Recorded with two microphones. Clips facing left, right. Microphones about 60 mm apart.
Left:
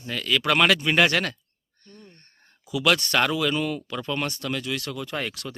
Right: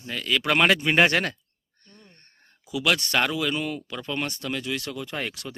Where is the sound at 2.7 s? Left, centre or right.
Centre.